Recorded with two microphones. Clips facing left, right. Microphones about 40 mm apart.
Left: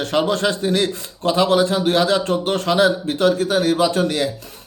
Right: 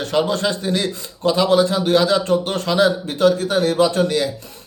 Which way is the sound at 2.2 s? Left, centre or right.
Left.